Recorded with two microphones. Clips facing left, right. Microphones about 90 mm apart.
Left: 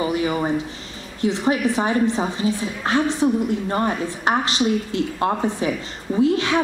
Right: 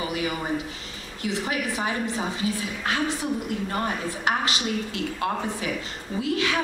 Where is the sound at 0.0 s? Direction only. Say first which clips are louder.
Left 7 dB; 30° left (ahead or behind).